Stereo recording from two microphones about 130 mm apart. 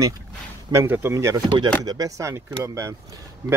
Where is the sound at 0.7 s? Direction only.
20° right (ahead or behind).